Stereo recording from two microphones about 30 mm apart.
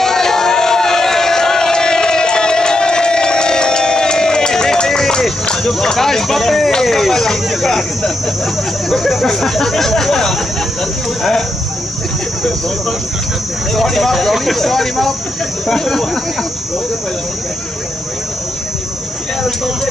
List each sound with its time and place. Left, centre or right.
0.0 s a sound: centre
5.5 s speech: centre
9.2 s speech: centre
13.7 s speech: centre